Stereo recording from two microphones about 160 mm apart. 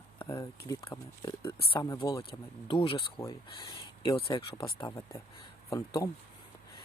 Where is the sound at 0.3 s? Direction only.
30° left (ahead or behind).